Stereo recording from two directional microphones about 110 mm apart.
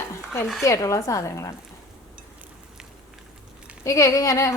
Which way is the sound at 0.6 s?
30° left (ahead or behind).